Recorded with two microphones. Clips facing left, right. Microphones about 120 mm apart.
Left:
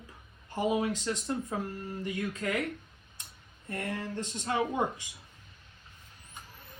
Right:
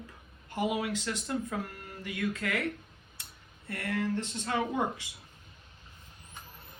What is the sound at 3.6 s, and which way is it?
Speech, 20° left (ahead or behind).